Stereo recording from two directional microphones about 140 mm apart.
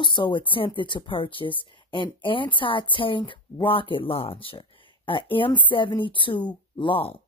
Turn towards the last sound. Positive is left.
turn(degrees=40)  # may be behind; listen again after turning